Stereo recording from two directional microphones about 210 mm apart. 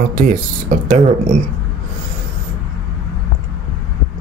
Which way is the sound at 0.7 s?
35° right (ahead or behind).